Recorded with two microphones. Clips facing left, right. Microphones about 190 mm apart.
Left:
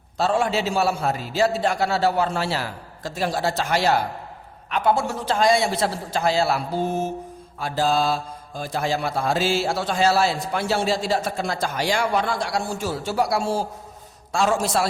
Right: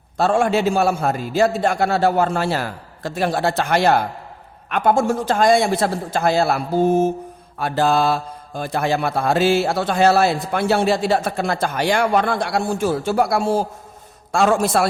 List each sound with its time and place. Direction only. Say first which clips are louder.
0.2 s a man's voice: right 4 dB; 50° right (ahead or behind)
7.6 s mantra: right 4 dB; 60° right (ahead or behind)